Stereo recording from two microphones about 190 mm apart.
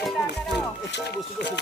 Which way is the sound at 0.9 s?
65° left (ahead or behind).